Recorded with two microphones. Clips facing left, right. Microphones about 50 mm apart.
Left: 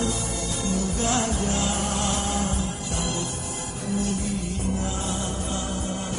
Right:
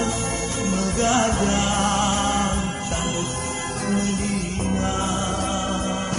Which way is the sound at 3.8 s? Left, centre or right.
Right.